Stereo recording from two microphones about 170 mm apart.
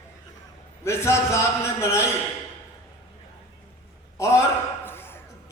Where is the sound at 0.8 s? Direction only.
15° left (ahead or behind).